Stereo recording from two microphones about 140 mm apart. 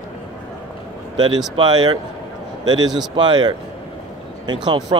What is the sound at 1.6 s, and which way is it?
A man's voice, 30° right (ahead or behind).